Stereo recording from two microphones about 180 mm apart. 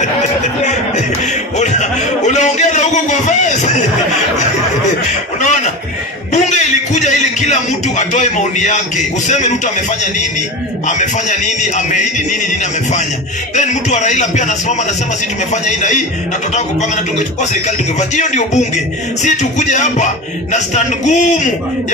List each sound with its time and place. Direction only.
1.6 s a man's voice: 40° left (ahead or behind)
5.4 s a sound: 40° left (ahead or behind)
6.3 s a man's voice: 40° left (ahead or behind)
10.9 s speech: 40° left (ahead or behind)
13.6 s speech: 40° left (ahead or behind)
18.1 s speech: 40° left (ahead or behind)